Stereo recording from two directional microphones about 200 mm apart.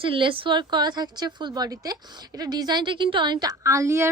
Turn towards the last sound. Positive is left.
turn(degrees=-15)  # may be behind; listen again after turning